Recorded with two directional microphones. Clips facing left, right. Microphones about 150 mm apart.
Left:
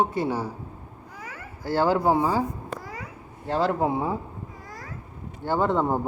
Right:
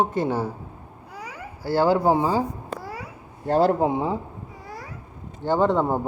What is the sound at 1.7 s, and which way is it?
Speech, 15° right (ahead or behind).